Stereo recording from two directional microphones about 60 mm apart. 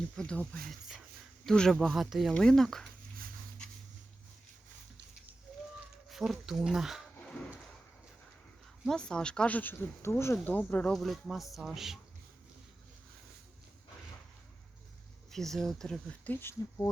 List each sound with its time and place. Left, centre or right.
0.2 s speech: centre
0.7 s speech: centre
1.5 s speech: centre
1.7 s speech: centre
2.3 s speech: centre
6.1 s speech: centre
8.9 s speech: centre
9.5 s speech: left
10.0 s speech: left
10.4 s speech: left
10.9 s speech: centre
15.3 s speech: centre
16.2 s speech: left